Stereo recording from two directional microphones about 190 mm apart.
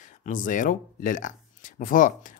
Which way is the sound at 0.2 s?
45° left (ahead or behind).